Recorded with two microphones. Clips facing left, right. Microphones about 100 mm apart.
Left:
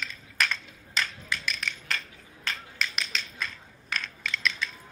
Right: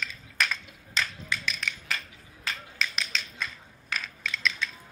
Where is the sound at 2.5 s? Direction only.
Centre (ahead or behind).